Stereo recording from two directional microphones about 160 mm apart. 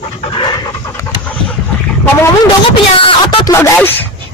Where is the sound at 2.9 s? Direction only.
30° left (ahead or behind).